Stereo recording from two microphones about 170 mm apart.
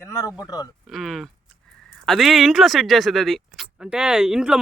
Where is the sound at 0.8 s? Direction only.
Centre (ahead or behind).